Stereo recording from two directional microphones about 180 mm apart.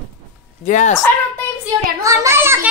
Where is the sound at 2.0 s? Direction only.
15° right (ahead or behind).